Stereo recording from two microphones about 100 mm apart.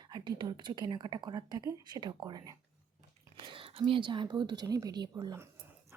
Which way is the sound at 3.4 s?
60° right (ahead or behind).